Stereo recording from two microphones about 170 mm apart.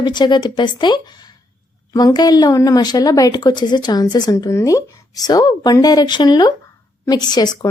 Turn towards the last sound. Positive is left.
turn(degrees=25)  # may be behind; listen again after turning